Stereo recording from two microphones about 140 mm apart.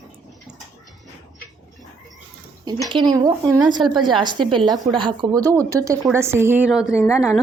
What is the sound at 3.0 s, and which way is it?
A woman's voice, 25° right (ahead or behind).